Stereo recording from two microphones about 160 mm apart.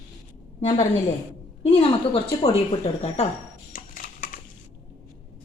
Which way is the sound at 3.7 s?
60° left (ahead or behind).